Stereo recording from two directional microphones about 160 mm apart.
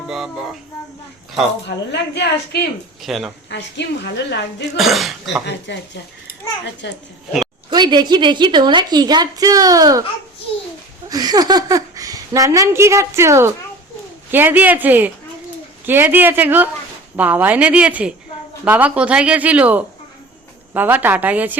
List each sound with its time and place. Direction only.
0.1 s music: 5° right (ahead or behind)
1.6 s a woman's voice: 90° left
3.0 s music: centre (ahead or behind)
3.5 s a woman's voice: 90° left
4.8 s music: centre (ahead or behind)
5.5 s a woman's voice: 90° left
7.7 s speech: 25° right (ahead or behind)
11.1 s speech: 25° right (ahead or behind)